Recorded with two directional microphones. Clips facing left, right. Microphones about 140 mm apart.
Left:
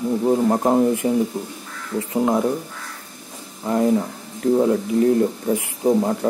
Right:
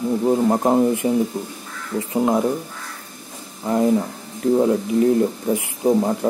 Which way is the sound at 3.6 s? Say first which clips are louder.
Right 1 dB; 10° right (ahead or behind).